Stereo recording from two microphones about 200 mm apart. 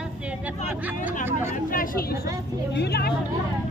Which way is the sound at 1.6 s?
45° left (ahead or behind).